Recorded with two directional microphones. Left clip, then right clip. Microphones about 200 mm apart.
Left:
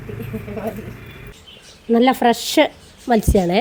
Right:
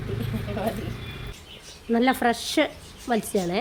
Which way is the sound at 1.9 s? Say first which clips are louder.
Left 7 dB; 20° left (ahead or behind).